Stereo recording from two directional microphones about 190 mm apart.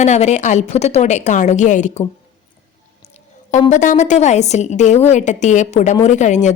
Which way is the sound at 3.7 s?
40° left (ahead or behind).